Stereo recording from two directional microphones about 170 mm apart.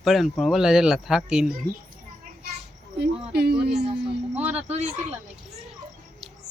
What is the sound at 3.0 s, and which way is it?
Speech, 70° right (ahead or behind).